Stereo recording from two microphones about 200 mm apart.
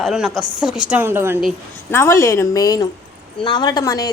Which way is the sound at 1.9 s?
15° left (ahead or behind).